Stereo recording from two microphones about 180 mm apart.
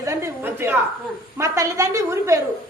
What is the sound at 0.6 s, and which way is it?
A man's voice, 15° right (ahead or behind).